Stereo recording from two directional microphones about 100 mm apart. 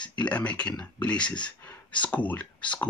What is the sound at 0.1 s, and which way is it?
Speech, 15° left (ahead or behind).